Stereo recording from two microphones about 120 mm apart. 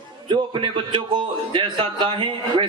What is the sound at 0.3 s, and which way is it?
A man's voice, 45° right (ahead or behind).